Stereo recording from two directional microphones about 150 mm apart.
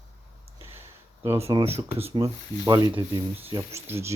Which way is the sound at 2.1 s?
20° right (ahead or behind).